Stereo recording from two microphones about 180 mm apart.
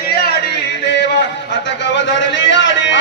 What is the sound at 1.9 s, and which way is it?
A man's voice, 80° left.